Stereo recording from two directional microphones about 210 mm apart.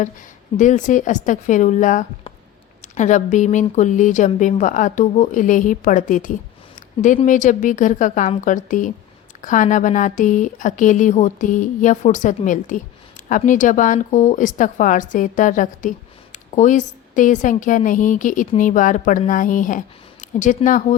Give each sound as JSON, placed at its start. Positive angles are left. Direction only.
{"t": 0.5, "sound": "a woman's voice", "side_deg": 35}